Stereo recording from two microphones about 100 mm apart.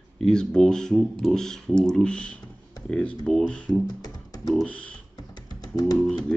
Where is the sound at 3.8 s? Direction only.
40° left (ahead or behind).